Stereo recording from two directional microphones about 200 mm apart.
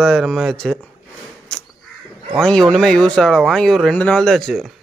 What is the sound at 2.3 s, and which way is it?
Speech, 5° left (ahead or behind).